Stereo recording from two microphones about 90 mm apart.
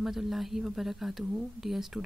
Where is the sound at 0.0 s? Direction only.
5° right (ahead or behind).